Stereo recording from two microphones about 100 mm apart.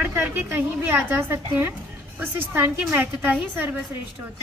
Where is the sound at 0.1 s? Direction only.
25° right (ahead or behind).